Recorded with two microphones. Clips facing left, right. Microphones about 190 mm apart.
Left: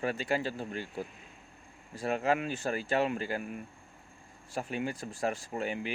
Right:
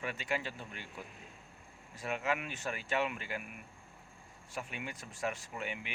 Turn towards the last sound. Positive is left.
turn(degrees=35)  # may be behind; listen again after turning